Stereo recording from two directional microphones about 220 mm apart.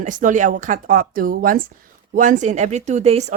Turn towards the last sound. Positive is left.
turn(degrees=-30)  # may be behind; listen again after turning